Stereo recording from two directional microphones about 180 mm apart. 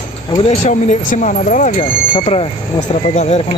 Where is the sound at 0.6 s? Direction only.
45° left (ahead or behind).